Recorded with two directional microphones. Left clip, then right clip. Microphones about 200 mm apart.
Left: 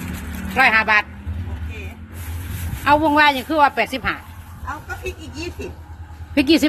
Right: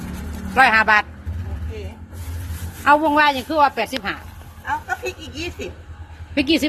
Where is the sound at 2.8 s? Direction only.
Centre (ahead or behind).